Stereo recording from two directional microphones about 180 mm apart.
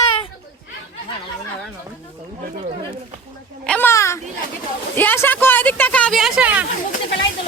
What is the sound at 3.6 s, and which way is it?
A woman's voice, 10° left (ahead or behind).